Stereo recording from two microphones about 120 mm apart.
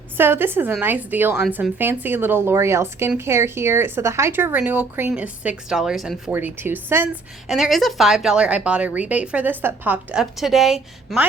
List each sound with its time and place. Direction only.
0.2 s speech: 20° right (ahead or behind); by 6.3 s centre (ahead or behind)
6.3 s speech: 15° right (ahead or behind)
7.4 s speech: centre (ahead or behind)